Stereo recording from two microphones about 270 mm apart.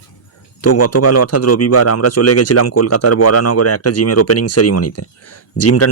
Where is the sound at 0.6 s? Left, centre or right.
Left.